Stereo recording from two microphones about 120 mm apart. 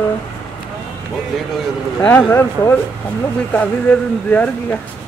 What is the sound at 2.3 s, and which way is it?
Speech, 15° left (ahead or behind).